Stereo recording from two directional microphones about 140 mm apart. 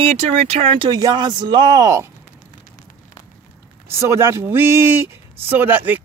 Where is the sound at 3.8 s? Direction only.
20° right (ahead or behind).